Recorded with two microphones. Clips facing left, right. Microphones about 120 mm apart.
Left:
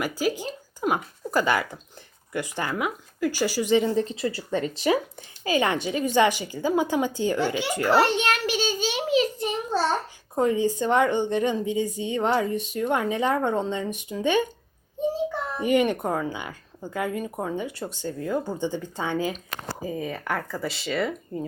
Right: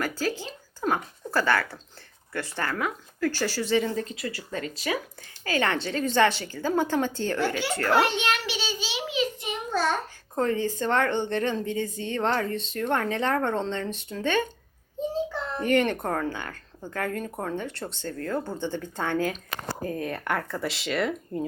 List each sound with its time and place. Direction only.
0.0 s speech: 15° left (ahead or behind)
4.1 s speech: 30° left (ahead or behind)
5.4 s speech: 15° left (ahead or behind)
8.0 s a sound: 45° left (ahead or behind)
10.3 s speech: 15° left (ahead or behind)
15.5 s speech: 10° left (ahead or behind)